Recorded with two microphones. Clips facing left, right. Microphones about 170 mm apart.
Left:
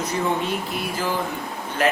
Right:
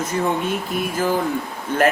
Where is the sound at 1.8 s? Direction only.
50° right (ahead or behind).